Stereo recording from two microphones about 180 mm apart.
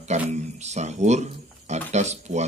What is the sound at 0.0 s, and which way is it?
Speech, 40° right (ahead or behind).